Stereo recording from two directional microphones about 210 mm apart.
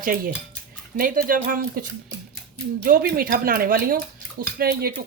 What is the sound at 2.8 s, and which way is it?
Speech, 45° right (ahead or behind).